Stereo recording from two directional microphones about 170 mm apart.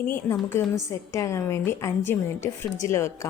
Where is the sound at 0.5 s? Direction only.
15° left (ahead or behind).